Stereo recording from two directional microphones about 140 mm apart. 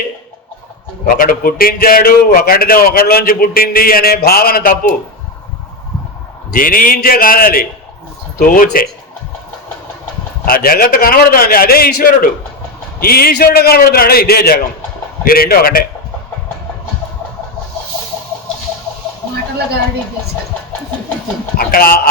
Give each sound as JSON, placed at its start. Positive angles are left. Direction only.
{"t": 1.0, "sound": "a man's voice", "side_deg": 90}
{"t": 6.5, "sound": "a man's voice", "side_deg": 90}
{"t": 8.4, "sound": "speech", "side_deg": 80}
{"t": 10.4, "sound": "a man's voice", "side_deg": 90}
{"t": 21.6, "sound": "a man's voice", "side_deg": 90}